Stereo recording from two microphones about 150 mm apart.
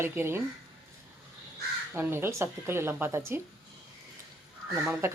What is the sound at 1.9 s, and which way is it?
Speech, 15° right (ahead or behind).